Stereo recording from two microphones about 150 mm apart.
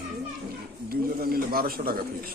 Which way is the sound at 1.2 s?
90° right.